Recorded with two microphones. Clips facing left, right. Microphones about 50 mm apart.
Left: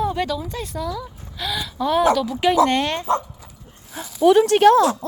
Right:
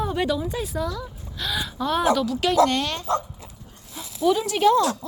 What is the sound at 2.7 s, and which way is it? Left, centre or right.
Speech, left.